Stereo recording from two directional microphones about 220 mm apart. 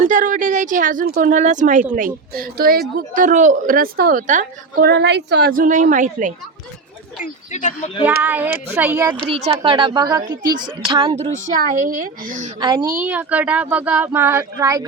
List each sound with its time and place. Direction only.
0.0 s a woman's voice: 35° right (ahead or behind)
7.2 s speech: 35° left (ahead or behind)
8.2 s a woman's voice: 10° right (ahead or behind)
9.3 s a woman's voice: 25° right (ahead or behind)
12.5 s a woman's voice: 20° right (ahead or behind)